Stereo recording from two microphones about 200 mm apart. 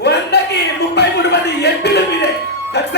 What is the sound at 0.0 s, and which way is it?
Chuckle, 55° left (ahead or behind).